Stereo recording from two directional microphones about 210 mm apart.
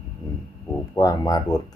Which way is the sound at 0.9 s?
20° left (ahead or behind).